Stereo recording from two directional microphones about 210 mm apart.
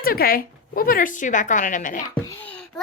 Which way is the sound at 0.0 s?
45° left (ahead or behind).